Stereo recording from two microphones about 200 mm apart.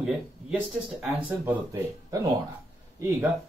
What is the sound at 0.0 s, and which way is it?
Speech, 5° right (ahead or behind).